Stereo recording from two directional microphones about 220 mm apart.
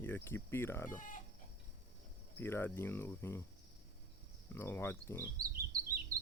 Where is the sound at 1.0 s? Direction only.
35° left (ahead or behind).